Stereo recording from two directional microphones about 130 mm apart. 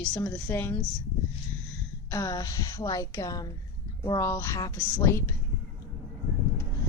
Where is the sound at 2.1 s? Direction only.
25° left (ahead or behind).